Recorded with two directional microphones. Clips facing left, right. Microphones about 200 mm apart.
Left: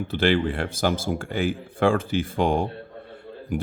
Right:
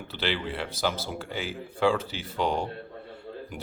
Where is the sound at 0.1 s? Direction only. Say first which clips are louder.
Left 9 dB; 50° left (ahead or behind).